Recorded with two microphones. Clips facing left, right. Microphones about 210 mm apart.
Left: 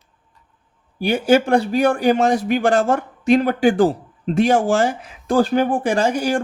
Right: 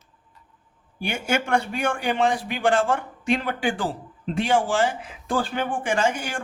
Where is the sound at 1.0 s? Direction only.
35° left (ahead or behind).